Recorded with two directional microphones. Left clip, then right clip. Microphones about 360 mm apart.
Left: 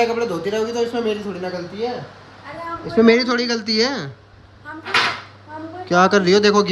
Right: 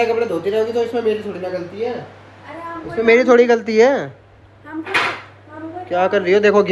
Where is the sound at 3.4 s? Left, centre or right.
Centre.